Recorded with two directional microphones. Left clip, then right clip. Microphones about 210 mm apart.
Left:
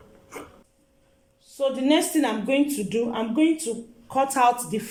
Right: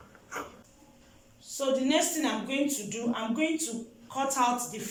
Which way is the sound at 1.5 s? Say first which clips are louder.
Left 5 dB; 40° left (ahead or behind).